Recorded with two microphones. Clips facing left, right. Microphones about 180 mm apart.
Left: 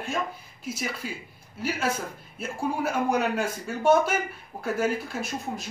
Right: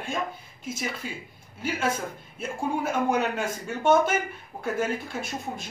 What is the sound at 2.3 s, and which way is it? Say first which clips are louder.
A man's voice: even; 5° left (ahead or behind).